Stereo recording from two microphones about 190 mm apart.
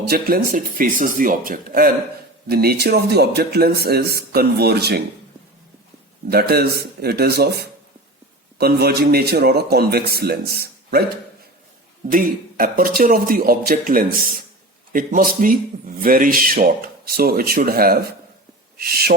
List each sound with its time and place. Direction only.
0.1 s a man's voice: 50° right (ahead or behind)
6.3 s a man's voice: 55° right (ahead or behind)
12.0 s a man's voice: 50° right (ahead or behind)